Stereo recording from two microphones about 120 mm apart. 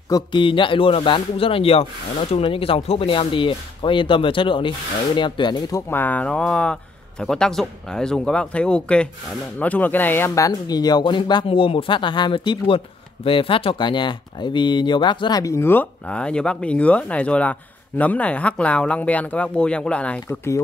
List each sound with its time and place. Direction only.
0.1 s speech: 40° left (ahead or behind)
5.8 s speech: 20° left (ahead or behind); by 11.4 s 35° left (ahead or behind)
11.4 s speech: 50° left (ahead or behind); by 20.3 s 10° left (ahead or behind)